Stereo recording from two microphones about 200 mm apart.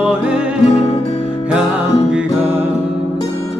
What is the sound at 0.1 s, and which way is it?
Music, 5° right (ahead or behind).